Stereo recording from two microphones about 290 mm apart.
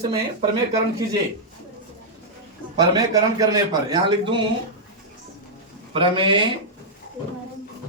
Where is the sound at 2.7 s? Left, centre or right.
Centre.